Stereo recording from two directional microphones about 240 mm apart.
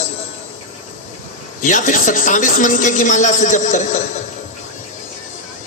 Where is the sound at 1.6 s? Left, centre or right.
Left.